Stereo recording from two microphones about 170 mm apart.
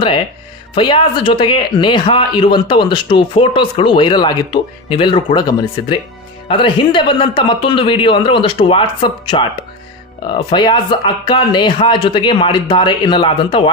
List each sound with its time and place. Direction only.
0.7 s a man's voice: 30° left (ahead or behind)